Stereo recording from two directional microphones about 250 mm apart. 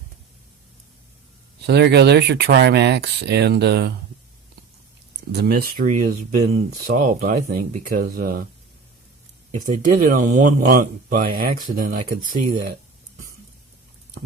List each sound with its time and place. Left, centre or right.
1.6 s speech: right
5.3 s speech: right
9.6 s speech: right